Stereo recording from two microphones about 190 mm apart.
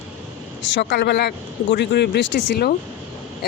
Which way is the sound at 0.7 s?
65° left (ahead or behind).